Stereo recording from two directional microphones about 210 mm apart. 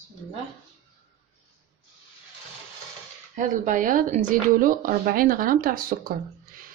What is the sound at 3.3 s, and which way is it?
A woman's voice, 35° right (ahead or behind).